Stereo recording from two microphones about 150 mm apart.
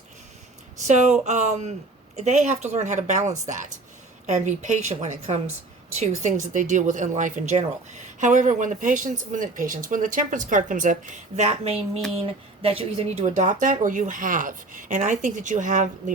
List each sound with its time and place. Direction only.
0.9 s a woman's voice: 50° right (ahead or behind)